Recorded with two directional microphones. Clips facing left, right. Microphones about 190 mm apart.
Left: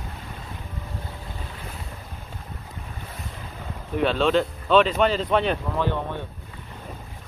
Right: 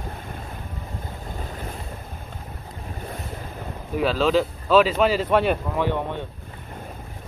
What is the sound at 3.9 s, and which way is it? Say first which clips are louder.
Speech: right 1 dB; centre (ahead or behind).